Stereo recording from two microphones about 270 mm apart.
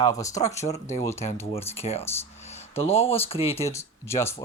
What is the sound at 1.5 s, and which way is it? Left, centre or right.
Speech, left.